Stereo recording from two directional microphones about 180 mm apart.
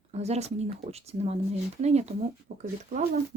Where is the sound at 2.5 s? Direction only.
70° right (ahead or behind).